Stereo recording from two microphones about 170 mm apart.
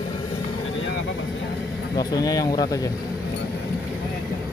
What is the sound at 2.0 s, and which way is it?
Speech, 20° left (ahead or behind).